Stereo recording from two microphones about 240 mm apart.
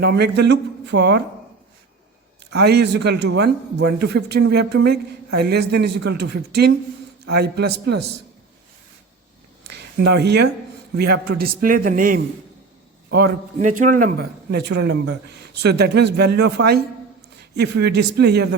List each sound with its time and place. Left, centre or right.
0.0 s speech: right
2.5 s speech: right
9.6 s a man's voice: right